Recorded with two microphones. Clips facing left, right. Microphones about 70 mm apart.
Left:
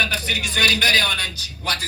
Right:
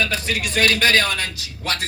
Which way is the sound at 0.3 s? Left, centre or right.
Right.